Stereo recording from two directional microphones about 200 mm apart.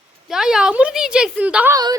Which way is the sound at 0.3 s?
5° right (ahead or behind).